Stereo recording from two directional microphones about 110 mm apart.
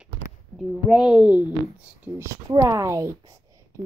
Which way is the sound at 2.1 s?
25° right (ahead or behind).